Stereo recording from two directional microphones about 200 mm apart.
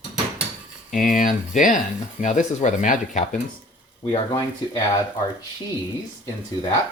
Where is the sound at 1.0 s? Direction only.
45° left (ahead or behind).